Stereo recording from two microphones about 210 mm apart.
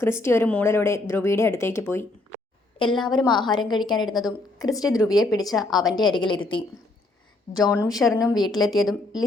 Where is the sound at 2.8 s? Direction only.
20° left (ahead or behind).